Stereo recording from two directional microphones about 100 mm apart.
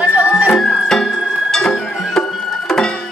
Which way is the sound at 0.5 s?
5° left (ahead or behind).